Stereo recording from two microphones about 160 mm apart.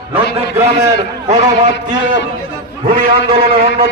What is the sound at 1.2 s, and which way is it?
Speech, 45° right (ahead or behind).